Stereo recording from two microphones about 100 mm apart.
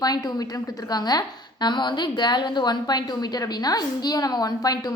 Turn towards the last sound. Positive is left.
turn(degrees=40)  # may be behind; listen again after turning